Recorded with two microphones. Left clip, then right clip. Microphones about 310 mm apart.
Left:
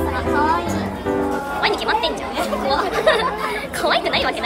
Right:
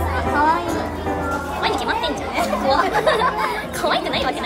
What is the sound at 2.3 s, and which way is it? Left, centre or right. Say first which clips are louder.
Chatter: right 4 dB; right.